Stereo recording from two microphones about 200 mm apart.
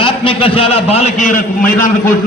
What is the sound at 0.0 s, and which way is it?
A man's voice, 25° left (ahead or behind).